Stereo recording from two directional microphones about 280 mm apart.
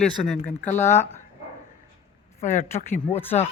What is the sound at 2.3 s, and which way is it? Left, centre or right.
Speech, left.